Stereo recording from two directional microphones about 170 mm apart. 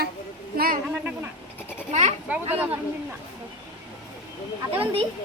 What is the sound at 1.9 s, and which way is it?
Speech, 40° right (ahead or behind).